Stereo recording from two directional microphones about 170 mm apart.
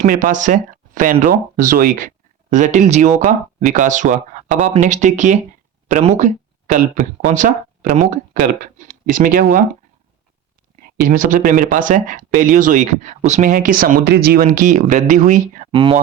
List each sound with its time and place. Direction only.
0.0 s speech: 50° right (ahead or behind)
11.1 s speech: 55° right (ahead or behind)
14.1 s speech: 65° right (ahead or behind); by 15.7 s 50° right (ahead or behind)
15.7 s speech: 30° right (ahead or behind)